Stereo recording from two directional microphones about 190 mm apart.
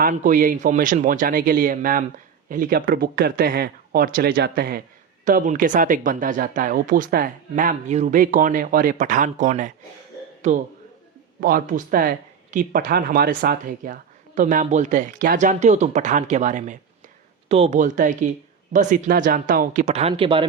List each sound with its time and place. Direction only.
0.0 s speech: 45° right (ahead or behind)
5.2 s speech: 45° right (ahead or behind)
11.3 s speech: 50° right (ahead or behind); by 20.5 s 25° right (ahead or behind)